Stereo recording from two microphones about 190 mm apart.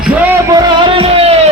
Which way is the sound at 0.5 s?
30° right (ahead or behind).